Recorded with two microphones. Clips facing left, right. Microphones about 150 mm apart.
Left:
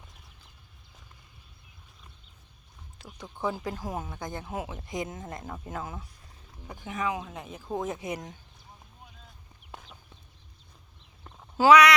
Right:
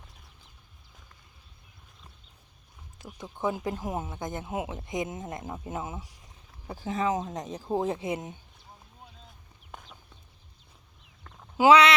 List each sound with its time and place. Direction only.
3.0 s speech: 20° right (ahead or behind)
6.7 s speech: 35° right (ahead or behind)
9.7 s chicken: centre (ahead or behind)
11.2 s a sound: 15° left (ahead or behind)
11.7 s speech: 25° right (ahead or behind)